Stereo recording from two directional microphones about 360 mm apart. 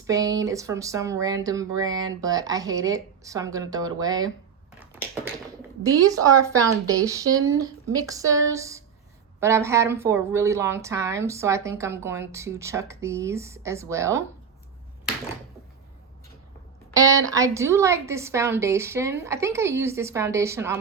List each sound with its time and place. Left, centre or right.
0.1 s speech: centre
5.8 s speech: centre
16.9 s speech: centre